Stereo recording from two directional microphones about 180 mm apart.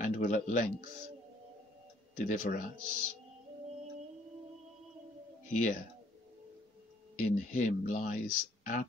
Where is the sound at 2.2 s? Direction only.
45° left (ahead or behind).